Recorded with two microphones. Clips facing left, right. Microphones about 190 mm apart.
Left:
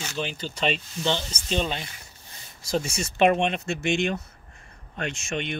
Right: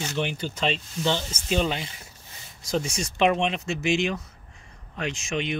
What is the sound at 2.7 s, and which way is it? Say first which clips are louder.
Speech: even; centre (ahead or behind).